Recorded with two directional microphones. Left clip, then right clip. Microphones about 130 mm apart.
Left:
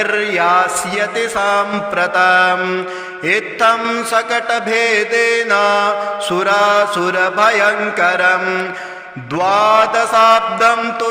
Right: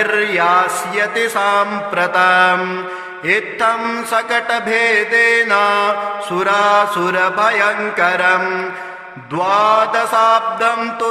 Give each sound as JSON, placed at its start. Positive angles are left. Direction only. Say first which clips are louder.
{"t": 0.0, "sound": "mantra", "louder": "even", "side_deg": 30}
{"t": 2.6, "sound": "mantra", "louder": "left 2 dB", "side_deg": 15}
{"t": 3.2, "sound": "mantra", "louder": "left 2 dB", "side_deg": 35}
{"t": 8.4, "sound": "mantra", "louder": "left 1 dB", "side_deg": 20}
{"t": 9.3, "sound": "mantra", "louder": "left 1 dB", "side_deg": 40}